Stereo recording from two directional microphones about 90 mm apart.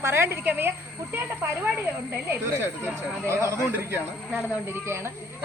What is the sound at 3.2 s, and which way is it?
Speech, 30° right (ahead or behind).